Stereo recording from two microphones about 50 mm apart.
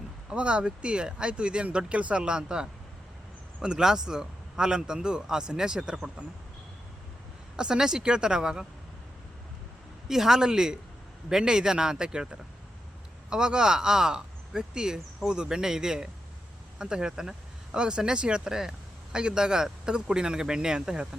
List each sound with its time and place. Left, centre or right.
0.3 s speech: right
7.5 s speech: centre
10.1 s speech: centre